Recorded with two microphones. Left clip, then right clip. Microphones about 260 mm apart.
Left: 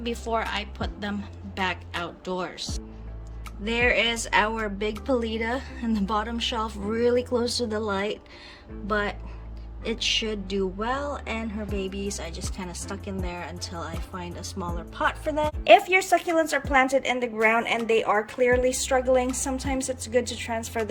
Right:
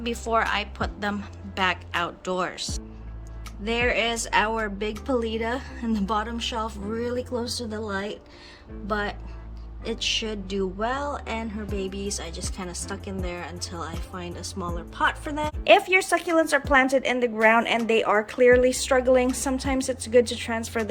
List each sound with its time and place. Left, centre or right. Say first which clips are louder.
0.0 s speech: right 4 dB; centre